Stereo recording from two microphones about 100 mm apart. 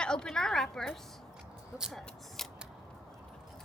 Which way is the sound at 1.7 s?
5° right (ahead or behind).